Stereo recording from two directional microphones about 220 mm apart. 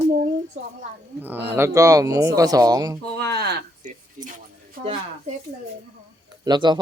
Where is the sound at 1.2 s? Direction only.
10° right (ahead or behind).